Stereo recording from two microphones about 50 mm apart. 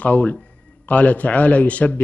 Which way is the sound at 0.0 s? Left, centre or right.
Left.